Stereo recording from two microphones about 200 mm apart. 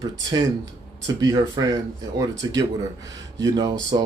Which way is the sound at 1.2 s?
20° right (ahead or behind).